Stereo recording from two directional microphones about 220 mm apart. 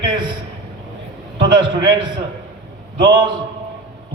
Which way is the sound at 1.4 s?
20° right (ahead or behind).